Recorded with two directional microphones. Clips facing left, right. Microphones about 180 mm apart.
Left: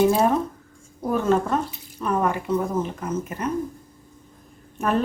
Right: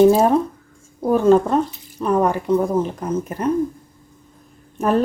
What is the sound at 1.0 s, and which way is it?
Speech, 35° right (ahead or behind).